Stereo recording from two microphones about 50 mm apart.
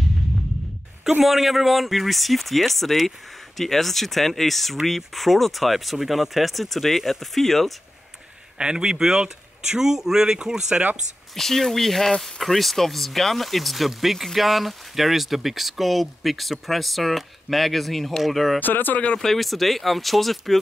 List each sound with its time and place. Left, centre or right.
1.2 s speech: centre
8.5 s speech: centre
11.3 s speech: centre
18.6 s speech: left
19.1 s speech: centre